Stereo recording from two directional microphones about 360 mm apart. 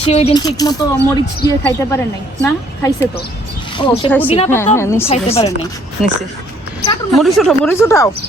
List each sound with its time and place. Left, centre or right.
0.0 s speech: centre
6.8 s speech: centre